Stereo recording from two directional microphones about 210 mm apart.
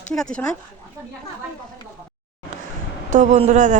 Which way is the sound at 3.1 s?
35° right (ahead or behind).